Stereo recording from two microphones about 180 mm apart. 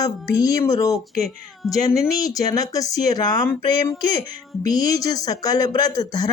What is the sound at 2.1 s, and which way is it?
Speech, 20° left (ahead or behind).